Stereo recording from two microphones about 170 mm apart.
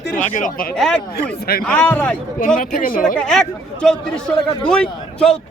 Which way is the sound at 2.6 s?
55° left (ahead or behind).